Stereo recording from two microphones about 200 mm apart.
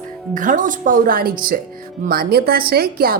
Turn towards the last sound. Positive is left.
turn(degrees=-50)  # may be behind; listen again after turning